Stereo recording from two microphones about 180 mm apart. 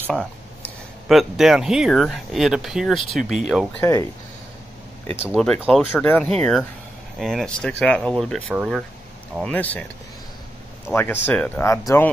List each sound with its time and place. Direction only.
0.0 s speech: 5° left (ahead or behind)
3.8 s speech: 15° left (ahead or behind)
5.2 s speech: centre (ahead or behind)
10.9 s speech: 10° left (ahead or behind)